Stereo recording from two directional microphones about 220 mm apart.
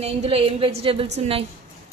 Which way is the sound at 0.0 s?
25° right (ahead or behind).